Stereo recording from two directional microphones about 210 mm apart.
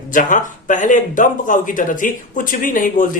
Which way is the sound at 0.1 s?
40° left (ahead or behind).